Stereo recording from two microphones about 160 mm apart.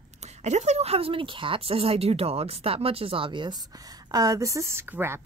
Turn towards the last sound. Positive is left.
turn(degrees=-15)  # may be behind; listen again after turning